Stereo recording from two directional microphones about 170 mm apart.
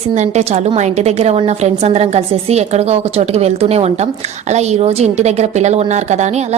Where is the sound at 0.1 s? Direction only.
40° right (ahead or behind).